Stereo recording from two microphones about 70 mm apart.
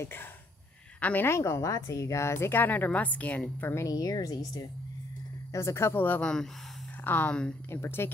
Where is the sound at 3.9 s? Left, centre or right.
Left.